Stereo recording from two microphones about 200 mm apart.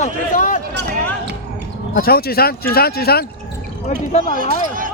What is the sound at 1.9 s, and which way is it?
Speech, 50° left (ahead or behind).